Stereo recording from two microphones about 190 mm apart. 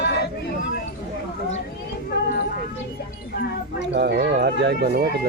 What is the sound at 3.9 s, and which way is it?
Speech, 65° right (ahead or behind).